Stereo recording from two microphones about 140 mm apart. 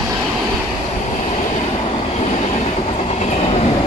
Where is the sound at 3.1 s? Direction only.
55° left (ahead or behind).